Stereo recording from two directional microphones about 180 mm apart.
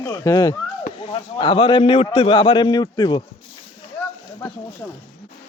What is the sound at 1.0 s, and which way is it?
A man's voice, 30° left (ahead or behind).